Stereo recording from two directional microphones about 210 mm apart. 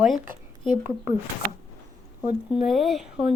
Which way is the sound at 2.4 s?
Centre (ahead or behind).